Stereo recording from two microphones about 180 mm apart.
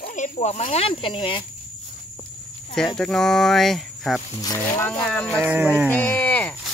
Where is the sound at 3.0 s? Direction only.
Centre (ahead or behind).